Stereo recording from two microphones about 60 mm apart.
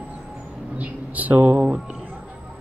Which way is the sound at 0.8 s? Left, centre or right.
Right.